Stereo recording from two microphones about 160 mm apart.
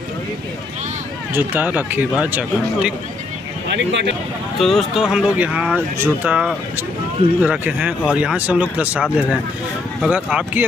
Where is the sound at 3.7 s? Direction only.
90° right.